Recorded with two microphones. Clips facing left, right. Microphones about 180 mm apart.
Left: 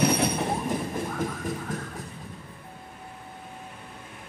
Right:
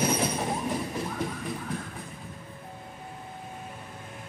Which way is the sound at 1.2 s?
45° left (ahead or behind).